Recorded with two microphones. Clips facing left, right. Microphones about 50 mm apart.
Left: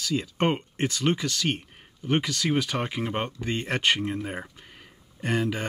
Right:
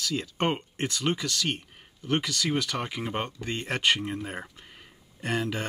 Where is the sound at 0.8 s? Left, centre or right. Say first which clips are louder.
Left 4 dB; left.